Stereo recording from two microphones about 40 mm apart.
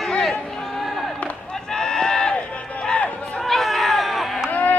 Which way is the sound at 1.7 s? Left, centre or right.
Centre.